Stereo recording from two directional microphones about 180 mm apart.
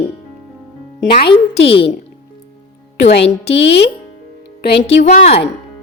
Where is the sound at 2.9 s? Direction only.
70° left (ahead or behind).